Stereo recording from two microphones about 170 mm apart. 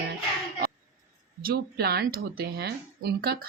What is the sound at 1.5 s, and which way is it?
Speech, 65° right (ahead or behind).